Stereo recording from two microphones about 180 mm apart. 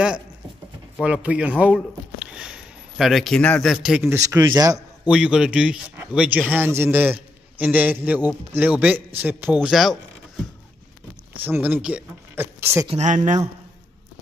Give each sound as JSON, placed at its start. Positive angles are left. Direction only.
{"t": 1.0, "sound": "speech", "side_deg": -5}
{"t": 4.1, "sound": "a man's voice", "side_deg": -15}
{"t": 5.0, "sound": "speech", "side_deg": -5}
{"t": 11.4, "sound": "speech", "side_deg": -10}
{"t": 12.8, "sound": "speech", "side_deg": -40}